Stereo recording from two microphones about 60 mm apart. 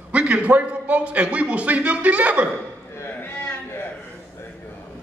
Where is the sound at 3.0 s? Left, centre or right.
Left.